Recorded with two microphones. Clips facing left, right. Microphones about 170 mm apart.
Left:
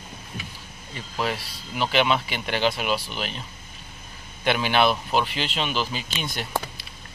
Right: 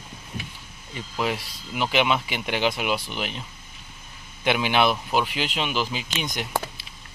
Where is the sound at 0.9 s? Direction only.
15° right (ahead or behind).